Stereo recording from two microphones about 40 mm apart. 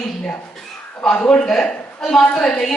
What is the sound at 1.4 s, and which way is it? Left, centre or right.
Speech, centre.